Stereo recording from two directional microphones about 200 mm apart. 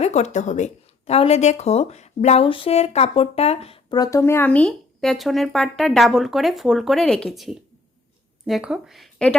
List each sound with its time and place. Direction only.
0.0 s speech: 35° left (ahead or behind); by 9.3 s centre (ahead or behind)